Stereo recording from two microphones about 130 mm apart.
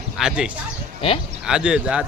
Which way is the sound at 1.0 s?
45° left (ahead or behind).